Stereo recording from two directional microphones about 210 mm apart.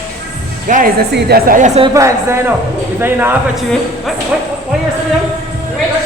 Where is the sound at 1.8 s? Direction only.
20° right (ahead or behind).